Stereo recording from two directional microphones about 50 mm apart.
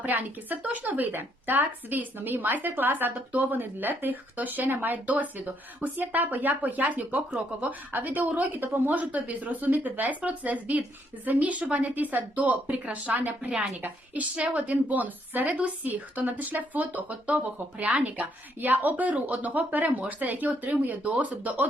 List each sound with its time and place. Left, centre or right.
0.0 s a woman's voice: right
13.4 s a woman's voice: centre
13.8 s a woman's voice: right